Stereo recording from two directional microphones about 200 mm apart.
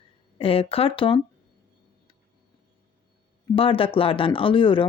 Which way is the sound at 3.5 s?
25° left (ahead or behind).